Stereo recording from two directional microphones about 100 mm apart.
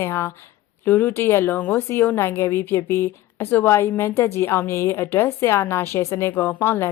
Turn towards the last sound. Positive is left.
turn(degrees=25)  # may be behind; listen again after turning